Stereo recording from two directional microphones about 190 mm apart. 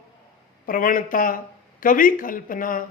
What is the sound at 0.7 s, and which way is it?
Speech, 45° left (ahead or behind).